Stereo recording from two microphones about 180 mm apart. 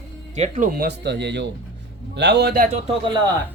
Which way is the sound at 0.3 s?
40° right (ahead or behind).